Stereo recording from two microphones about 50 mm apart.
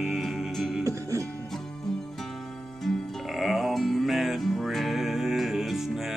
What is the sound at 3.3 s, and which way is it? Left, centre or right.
Music, centre.